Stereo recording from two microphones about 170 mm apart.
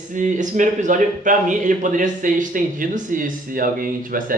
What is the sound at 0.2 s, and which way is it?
A man's voice, 50° right (ahead or behind).